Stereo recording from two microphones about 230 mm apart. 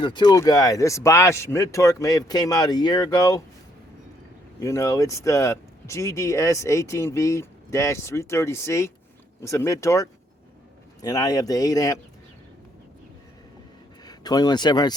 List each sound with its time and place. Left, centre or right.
0.0 s speech: centre
4.6 s speech: centre
14.0 s speech: centre